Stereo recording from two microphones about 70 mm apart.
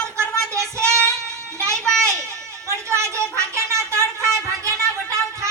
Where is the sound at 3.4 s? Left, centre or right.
Right.